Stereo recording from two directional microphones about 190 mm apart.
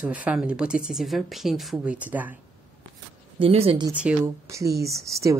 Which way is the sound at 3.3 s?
30° right (ahead or behind).